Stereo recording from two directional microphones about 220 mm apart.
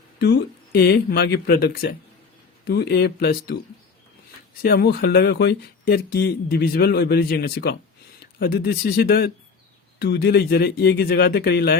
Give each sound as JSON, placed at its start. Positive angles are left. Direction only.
{"t": 0.2, "sound": "speech", "side_deg": 50}
{"t": 4.6, "sound": "speech", "side_deg": 45}